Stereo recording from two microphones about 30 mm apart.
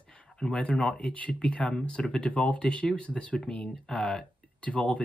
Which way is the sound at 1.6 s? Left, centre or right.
Left.